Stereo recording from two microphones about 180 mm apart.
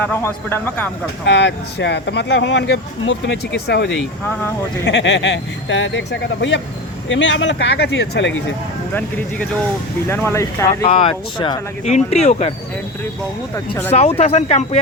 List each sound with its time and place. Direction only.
0.0 s speech: 10° left (ahead or behind)
1.2 s speech: 80° left
4.9 s speech: 85° left
7.1 s speech: 90° left
8.9 s speech: 10° left (ahead or behind)
10.8 s speech: 30° left (ahead or behind)
11.9 s speech: 40° left (ahead or behind)
14.2 s speech: 35° left (ahead or behind)